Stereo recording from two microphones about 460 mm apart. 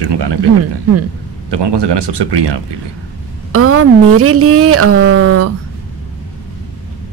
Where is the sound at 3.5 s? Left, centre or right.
Right.